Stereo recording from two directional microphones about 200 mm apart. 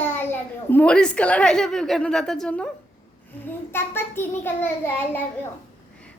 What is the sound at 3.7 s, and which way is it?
A child's voice, 10° left (ahead or behind).